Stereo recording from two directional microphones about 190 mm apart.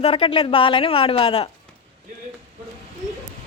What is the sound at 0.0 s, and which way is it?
Speech, 30° left (ahead or behind).